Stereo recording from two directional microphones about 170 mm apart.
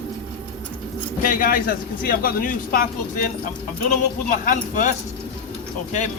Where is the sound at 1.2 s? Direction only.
55° left (ahead or behind).